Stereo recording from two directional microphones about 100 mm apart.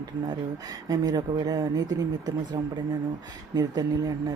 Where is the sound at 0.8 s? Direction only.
40° right (ahead or behind).